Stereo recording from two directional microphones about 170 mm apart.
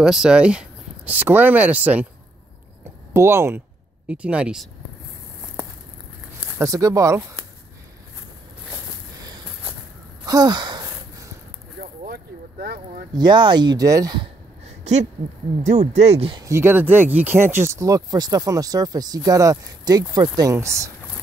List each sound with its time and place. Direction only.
0.0 s speech: 5° right (ahead or behind)
2.8 s a sound: 15° right (ahead or behind)
4.1 s speech: 5° right (ahead or behind)
6.4 s speech: 20° right (ahead or behind)
10.2 s wheeze: 20° right (ahead or behind)
11.8 s vehicle: 60° right (ahead or behind)
13.1 s speech: 25° right (ahead or behind)
15.6 s speech: 45° right (ahead or behind); by 20.9 s 20° right (ahead or behind)